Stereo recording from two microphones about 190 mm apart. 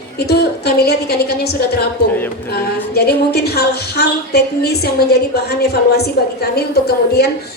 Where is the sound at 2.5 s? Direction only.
55° left (ahead or behind).